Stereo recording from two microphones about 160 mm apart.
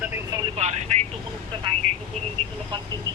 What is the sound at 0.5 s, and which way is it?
Vehicle, 45° right (ahead or behind).